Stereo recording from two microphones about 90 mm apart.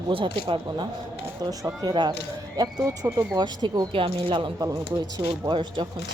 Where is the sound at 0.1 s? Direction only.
75° right (ahead or behind).